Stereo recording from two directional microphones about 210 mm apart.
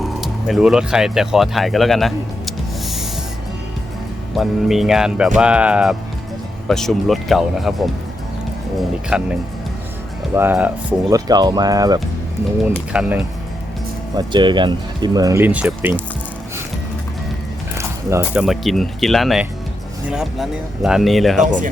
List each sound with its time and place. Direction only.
0.0 s speech: centre (ahead or behind)
4.4 s speech: centre (ahead or behind)
9.0 s speech: 5° right (ahead or behind)
11.1 s speech: 20° right (ahead or behind)
12.6 s speech: 5° right (ahead or behind)
14.2 s speech: 20° right (ahead or behind)
17.7 s speech: 10° right (ahead or behind)